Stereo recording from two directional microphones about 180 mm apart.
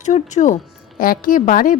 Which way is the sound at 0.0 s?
40° left (ahead or behind).